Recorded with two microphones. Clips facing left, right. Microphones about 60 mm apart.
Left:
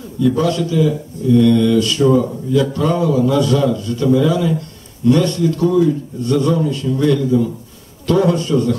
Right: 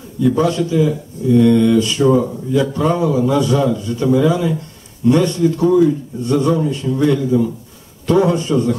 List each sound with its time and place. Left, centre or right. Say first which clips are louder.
0.2 s speech: right 1 dB; right